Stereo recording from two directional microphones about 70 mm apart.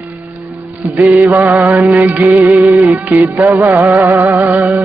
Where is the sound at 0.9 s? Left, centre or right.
Right.